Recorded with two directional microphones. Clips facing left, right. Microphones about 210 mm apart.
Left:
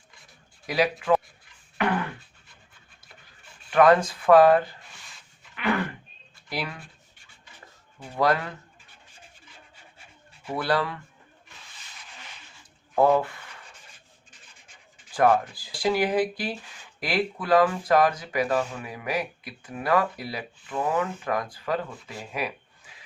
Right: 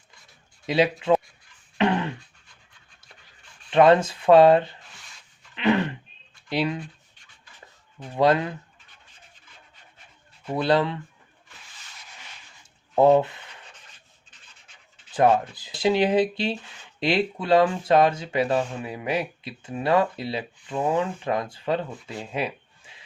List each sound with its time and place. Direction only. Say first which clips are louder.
0.7 s speech: right 3 dB; 25° right (ahead or behind)
1.8 s beatboxing: right 3 dB; 25° right (ahead or behind)
3.7 s speech: right 2 dB; 25° right (ahead or behind)
5.5 s throat clearing: right 5 dB; 25° right (ahead or behind)
6.5 s speech: right 8 dB; 20° right (ahead or behind)
8.1 s speech: right 4 dB; 20° right (ahead or behind)
10.5 s speech: right 4 dB; 20° right (ahead or behind)
13.0 s speech: right 4 dB; 25° right (ahead or behind)
13.8 s rub: left 2 dB; 10° left (ahead or behind)
15.1 s speech: right 1 dB; 20° right (ahead or behind)